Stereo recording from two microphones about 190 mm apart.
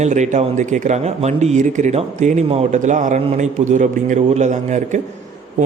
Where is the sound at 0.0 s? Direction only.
40° right (ahead or behind).